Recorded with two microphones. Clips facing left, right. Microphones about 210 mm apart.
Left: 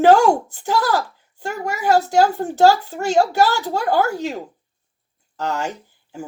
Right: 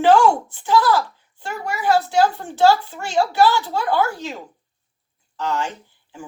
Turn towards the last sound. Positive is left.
turn(degrees=40)  # may be behind; listen again after turning